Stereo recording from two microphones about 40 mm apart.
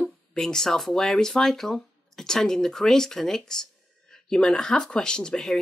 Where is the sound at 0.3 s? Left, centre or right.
Centre.